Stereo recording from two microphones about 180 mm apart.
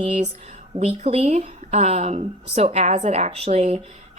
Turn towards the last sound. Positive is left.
turn(degrees=-35)  # may be behind; listen again after turning